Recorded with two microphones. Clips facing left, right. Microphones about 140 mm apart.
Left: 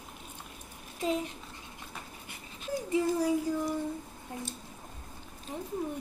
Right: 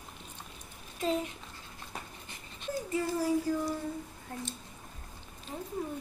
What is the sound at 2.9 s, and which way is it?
Speech, 15° left (ahead or behind).